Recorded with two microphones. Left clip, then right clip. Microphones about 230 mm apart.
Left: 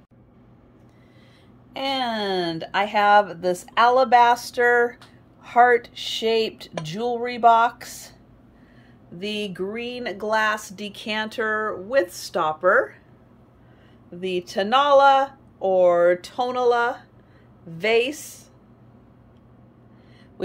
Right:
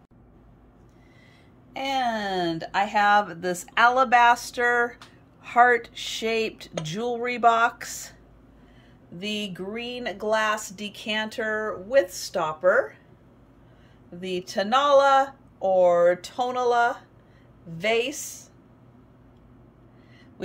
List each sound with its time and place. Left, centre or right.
1.7 s speech: centre
9.2 s speech: centre
14.2 s speech: centre
20.4 s a sound: centre